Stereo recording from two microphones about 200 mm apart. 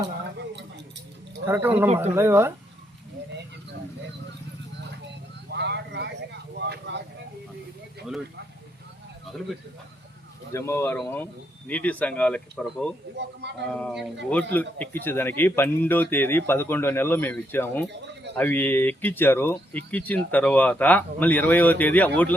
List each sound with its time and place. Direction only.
1.5 s speech: 10° right (ahead or behind)
5.5 s vehicle: 60° right (ahead or behind)
6.6 s speech: 60° right (ahead or behind)
10.5 s speech: 15° left (ahead or behind)
13.4 s speech: 60° right (ahead or behind)
13.7 s speech: centre (ahead or behind)